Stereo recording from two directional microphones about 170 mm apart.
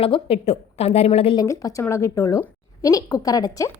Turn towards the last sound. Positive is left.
turn(degrees=20)  # may be behind; listen again after turning